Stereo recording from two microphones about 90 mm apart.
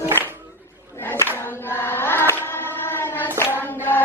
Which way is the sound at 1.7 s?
25° left (ahead or behind).